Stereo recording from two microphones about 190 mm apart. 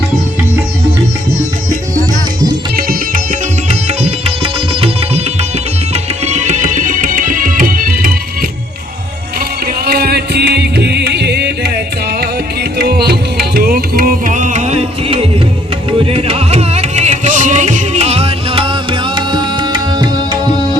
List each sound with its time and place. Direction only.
2.7 s music: 50° right (ahead or behind)
3.7 s music: 35° right (ahead or behind)
9.8 s music: 55° right (ahead or behind)
12.8 s music: 55° right (ahead or behind); by 20.6 s 25° right (ahead or behind)